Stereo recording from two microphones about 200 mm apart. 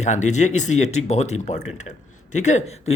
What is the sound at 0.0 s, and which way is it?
A man's voice, 35° left (ahead or behind).